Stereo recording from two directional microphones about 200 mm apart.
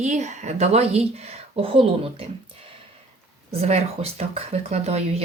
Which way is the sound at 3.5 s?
30° right (ahead or behind).